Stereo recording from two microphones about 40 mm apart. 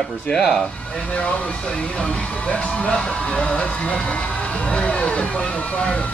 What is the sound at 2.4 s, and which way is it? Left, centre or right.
Speech, left.